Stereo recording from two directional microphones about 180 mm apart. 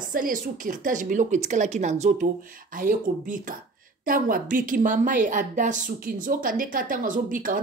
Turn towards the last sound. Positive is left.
turn(degrees=-50)  # may be behind; listen again after turning